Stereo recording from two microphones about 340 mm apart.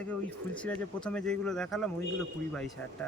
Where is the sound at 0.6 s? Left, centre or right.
Centre.